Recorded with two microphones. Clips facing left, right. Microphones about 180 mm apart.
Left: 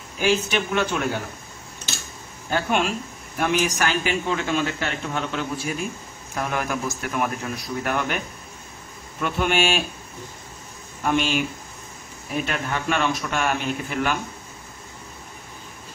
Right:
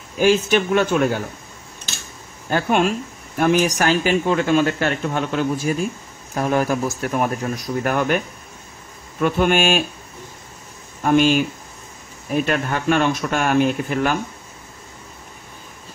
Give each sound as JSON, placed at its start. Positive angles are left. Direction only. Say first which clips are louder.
{"t": 0.2, "sound": "speech", "louder": "right 6 dB", "side_deg": -50}
{"t": 2.5, "sound": "speech", "louder": "right 4 dB", "side_deg": -50}
{"t": 4.3, "sound": "speech", "louder": "right 8 dB", "side_deg": -45}
{"t": 6.3, "sound": "speech", "louder": "right 7 dB", "side_deg": -35}
{"t": 9.2, "sound": "speech", "louder": "right 5 dB", "side_deg": -50}
{"t": 11.1, "sound": "speech", "louder": "right 7 dB", "side_deg": -45}
{"t": 12.4, "sound": "speech", "louder": "right 5 dB", "side_deg": -50}